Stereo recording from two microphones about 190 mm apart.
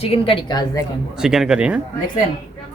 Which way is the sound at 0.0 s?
30° left (ahead or behind).